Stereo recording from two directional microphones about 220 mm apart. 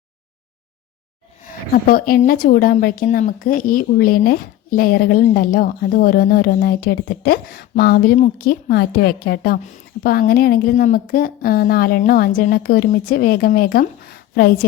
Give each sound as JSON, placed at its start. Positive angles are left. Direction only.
{"t": 1.7, "sound": "a woman's voice", "side_deg": 40}